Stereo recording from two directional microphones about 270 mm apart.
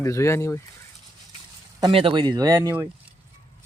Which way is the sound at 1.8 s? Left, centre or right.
Centre.